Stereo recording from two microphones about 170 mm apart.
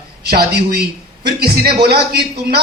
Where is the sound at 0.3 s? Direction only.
70° right (ahead or behind).